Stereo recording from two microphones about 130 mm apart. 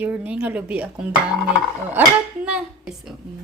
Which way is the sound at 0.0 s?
10° right (ahead or behind).